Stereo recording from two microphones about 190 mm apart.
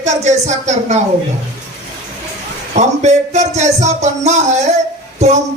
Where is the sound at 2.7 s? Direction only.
35° right (ahead or behind).